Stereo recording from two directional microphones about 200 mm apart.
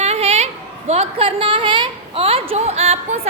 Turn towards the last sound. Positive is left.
turn(degrees=-30)  # may be behind; listen again after turning